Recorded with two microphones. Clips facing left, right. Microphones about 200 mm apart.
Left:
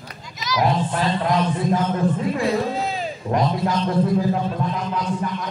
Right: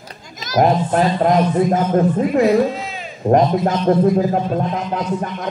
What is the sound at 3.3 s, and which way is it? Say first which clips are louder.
Speech: right 7 dB; 45° right (ahead or behind).